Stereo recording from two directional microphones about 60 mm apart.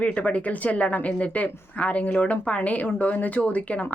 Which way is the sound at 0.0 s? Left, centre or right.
Left.